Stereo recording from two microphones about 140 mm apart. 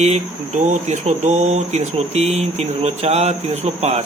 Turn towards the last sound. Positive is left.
turn(degrees=-50)  # may be behind; listen again after turning